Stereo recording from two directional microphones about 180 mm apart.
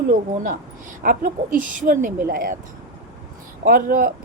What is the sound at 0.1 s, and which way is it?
Speech, 50° right (ahead or behind).